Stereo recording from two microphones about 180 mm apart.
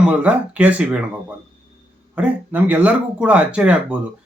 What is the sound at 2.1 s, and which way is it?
Speech, 10° right (ahead or behind).